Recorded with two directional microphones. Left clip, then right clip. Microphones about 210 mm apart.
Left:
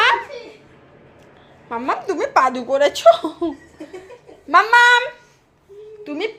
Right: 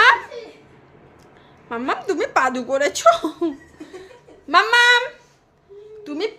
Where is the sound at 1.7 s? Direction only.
20° right (ahead or behind).